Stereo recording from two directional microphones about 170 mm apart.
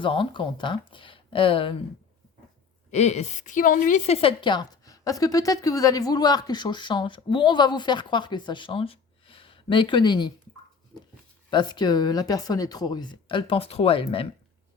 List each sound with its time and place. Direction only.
0.0 s speech: 30° left (ahead or behind)
2.9 s a woman's voice: 40° left (ahead or behind)
11.5 s a woman's voice: 25° left (ahead or behind)